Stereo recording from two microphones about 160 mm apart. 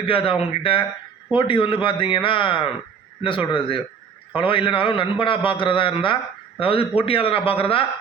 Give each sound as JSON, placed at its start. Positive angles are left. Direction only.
{"t": 0.0, "sound": "speech", "side_deg": 35}